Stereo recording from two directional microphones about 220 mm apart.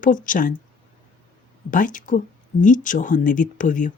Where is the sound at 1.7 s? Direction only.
35° left (ahead or behind).